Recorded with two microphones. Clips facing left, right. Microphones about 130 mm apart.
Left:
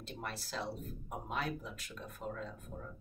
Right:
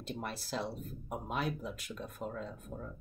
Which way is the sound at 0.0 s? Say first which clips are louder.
Right 3 dB; 15° right (ahead or behind).